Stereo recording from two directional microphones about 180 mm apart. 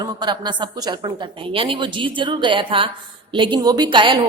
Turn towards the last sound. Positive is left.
turn(degrees=-25)  # may be behind; listen again after turning